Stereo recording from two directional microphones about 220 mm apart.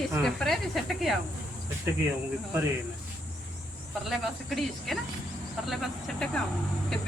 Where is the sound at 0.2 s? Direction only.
Centre (ahead or behind).